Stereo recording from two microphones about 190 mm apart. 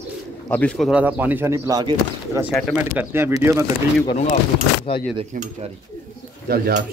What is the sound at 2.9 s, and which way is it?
Speech, 10° right (ahead or behind).